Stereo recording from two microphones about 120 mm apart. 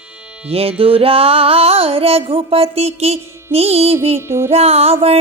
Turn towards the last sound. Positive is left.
turn(degrees=-60)  # may be behind; listen again after turning